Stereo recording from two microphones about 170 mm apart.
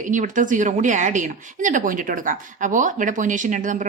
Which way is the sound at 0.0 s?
50° right (ahead or behind).